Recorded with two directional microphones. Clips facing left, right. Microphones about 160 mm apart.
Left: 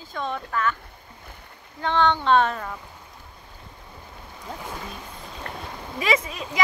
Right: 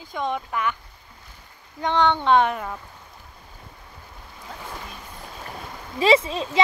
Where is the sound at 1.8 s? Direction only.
15° right (ahead or behind).